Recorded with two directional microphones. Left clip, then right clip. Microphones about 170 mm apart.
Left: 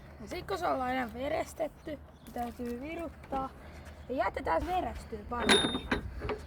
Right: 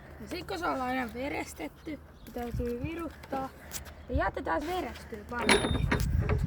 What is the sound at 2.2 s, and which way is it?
Speech, centre (ahead or behind).